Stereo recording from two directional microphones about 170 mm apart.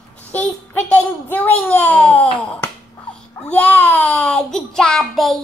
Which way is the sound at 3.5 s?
10° left (ahead or behind).